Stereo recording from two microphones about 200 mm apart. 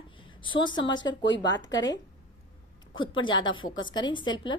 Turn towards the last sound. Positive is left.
turn(degrees=20)  # may be behind; listen again after turning